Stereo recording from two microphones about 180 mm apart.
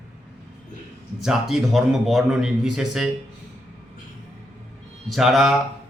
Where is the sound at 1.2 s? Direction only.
Centre (ahead or behind).